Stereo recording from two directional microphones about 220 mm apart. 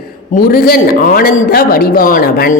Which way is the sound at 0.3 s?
40° left (ahead or behind).